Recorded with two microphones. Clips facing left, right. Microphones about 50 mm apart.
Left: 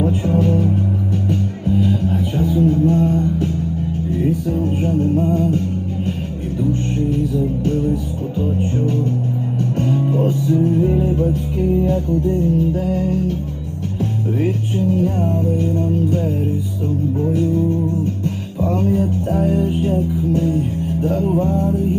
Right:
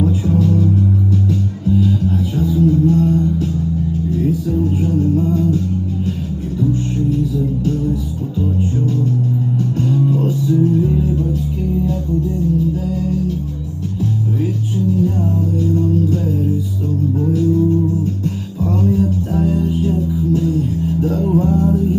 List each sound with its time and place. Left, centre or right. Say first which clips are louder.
0.0 s music: right 1 dB; left
9.7 s music: even; left